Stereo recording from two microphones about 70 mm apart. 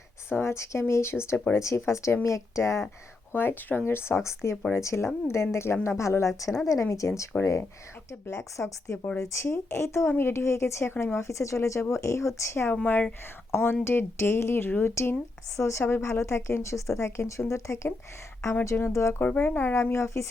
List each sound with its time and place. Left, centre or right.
0.3 s speech: left
3.3 s speech: left
12.7 s speech: centre
13.5 s speech: left
15.5 s speech: left
19.2 s speech: left